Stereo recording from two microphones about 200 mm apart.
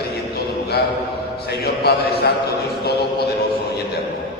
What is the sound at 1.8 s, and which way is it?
Speech, 55° left (ahead or behind).